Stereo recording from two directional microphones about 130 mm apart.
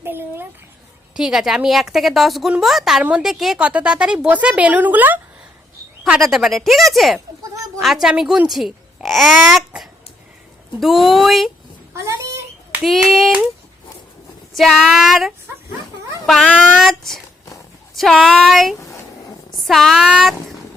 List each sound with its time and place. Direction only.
0.0 s speech: 15° right (ahead or behind)
1.1 s a woman's voice: 5° right (ahead or behind)
6.1 s a woman's voice: centre (ahead or behind)
11.9 s a sound: 25° right (ahead or behind)
12.8 s a woman's voice: centre (ahead or behind)
14.5 s a woman's voice: centre (ahead or behind)